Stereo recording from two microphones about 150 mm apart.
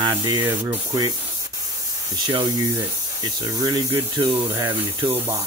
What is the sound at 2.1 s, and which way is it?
Speech, 30° right (ahead or behind).